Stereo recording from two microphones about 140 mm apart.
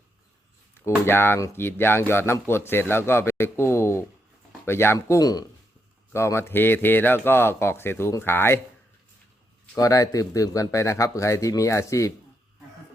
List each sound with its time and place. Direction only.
0.7 s speech: 15° left (ahead or behind)
9.7 s speech: 25° left (ahead or behind)